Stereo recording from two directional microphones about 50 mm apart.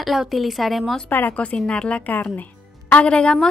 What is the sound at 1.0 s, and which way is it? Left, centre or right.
Speech, left.